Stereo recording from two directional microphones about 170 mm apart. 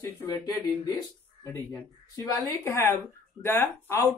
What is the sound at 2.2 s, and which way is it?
A woman's voice, 15° left (ahead or behind).